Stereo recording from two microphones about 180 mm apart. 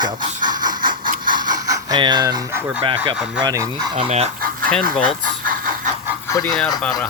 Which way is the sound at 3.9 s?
35° right (ahead or behind).